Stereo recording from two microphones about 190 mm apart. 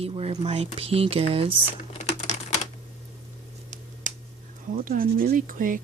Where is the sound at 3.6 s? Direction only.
40° right (ahead or behind).